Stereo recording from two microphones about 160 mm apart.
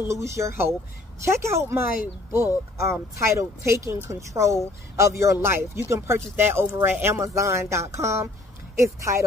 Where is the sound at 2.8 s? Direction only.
15° right (ahead or behind).